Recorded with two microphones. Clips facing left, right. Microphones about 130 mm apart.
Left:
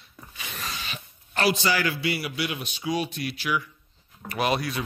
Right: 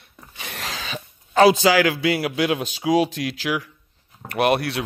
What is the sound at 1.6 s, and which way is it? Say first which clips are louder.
A man's voice: right 8 dB; 90° right.